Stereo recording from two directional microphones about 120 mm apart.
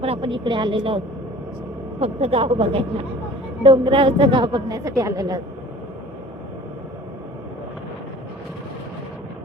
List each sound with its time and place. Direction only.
0.0 s a woman's voice: 50° right (ahead or behind)
2.0 s a woman's voice: 55° right (ahead or behind); by 5.4 s 30° right (ahead or behind)